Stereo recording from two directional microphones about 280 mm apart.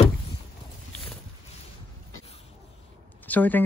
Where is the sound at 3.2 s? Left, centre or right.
Centre.